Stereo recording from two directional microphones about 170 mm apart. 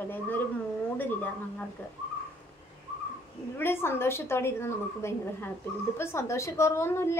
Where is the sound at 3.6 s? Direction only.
15° left (ahead or behind).